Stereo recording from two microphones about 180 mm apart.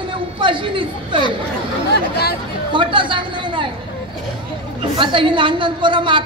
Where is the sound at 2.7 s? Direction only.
25° right (ahead or behind).